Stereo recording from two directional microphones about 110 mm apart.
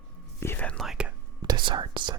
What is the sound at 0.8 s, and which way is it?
Whispering, 5° right (ahead or behind).